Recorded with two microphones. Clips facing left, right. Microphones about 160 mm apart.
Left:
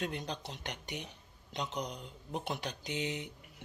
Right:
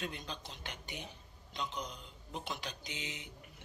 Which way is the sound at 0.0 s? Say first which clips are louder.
Left 5 dB; 65° left (ahead or behind).